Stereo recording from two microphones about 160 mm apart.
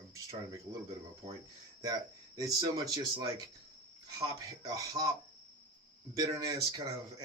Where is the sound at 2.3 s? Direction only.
25° right (ahead or behind).